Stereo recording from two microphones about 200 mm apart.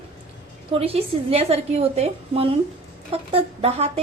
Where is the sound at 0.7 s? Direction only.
30° right (ahead or behind).